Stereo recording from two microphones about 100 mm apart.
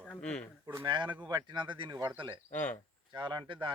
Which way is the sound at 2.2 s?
55° right (ahead or behind).